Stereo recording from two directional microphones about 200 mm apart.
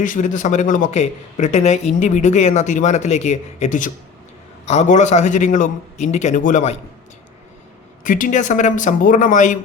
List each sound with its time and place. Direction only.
0.0 s a man's voice: 40° left (ahead or behind)
8.0 s a man's voice: 40° left (ahead or behind)